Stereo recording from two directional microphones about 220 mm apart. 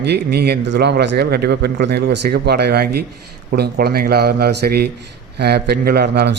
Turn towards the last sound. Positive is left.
turn(degrees=-50)  # may be behind; listen again after turning